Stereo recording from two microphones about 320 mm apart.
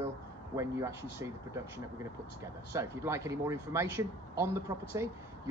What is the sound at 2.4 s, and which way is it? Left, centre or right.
Speech, centre.